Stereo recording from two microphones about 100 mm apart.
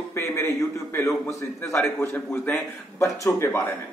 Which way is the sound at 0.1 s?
25° left (ahead or behind).